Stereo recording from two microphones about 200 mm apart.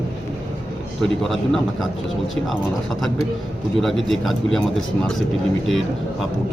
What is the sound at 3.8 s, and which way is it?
Speech, centre (ahead or behind).